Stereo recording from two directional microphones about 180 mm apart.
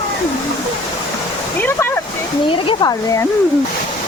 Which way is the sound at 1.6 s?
10° left (ahead or behind).